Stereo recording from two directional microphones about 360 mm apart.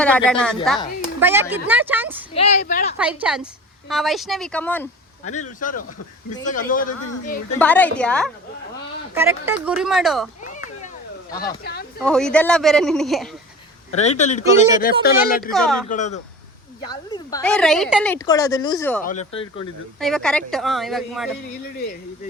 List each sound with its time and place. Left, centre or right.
0.0 s a woman's voice: centre
2.3 s speech: centre
3.0 s a woman's voice: centre
5.5 s speech: left
7.6 s a woman's voice: centre
10.4 s a sound: left
11.6 s speech: left
12.0 s a woman's voice: centre
13.9 s speech: centre
15.5 s a woman's voice: centre
15.9 s a woman's voice: centre
19.0 s a woman's voice: centre
20.0 s a woman's voice: centre